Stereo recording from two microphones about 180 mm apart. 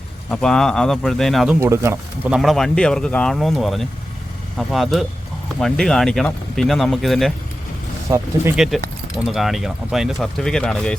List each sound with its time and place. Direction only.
0.3 s speech: 5° left (ahead or behind)
1.5 s speech: 15° right (ahead or behind); by 7.3 s centre (ahead or behind)
8.1 s speech: 15° right (ahead or behind)
8.5 s speech: centre (ahead or behind)